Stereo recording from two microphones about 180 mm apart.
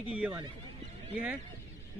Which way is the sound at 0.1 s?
10° right (ahead or behind).